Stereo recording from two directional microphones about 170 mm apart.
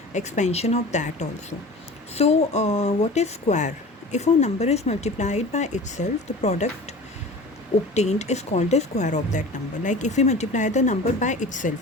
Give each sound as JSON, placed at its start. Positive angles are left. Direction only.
{"t": 0.1, "sound": "speech", "side_deg": 45}
{"t": 7.9, "sound": "speech", "side_deg": 40}